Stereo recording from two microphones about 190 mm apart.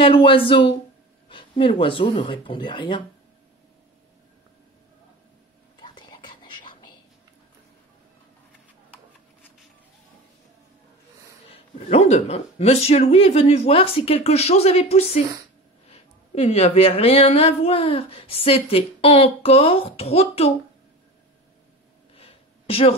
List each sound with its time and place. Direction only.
0.0 s speech: 30° left (ahead or behind)
5.8 s whispering: 25° left (ahead or behind)
11.4 s a woman's voice: 30° left (ahead or behind)
22.1 s a sound: 30° left (ahead or behind)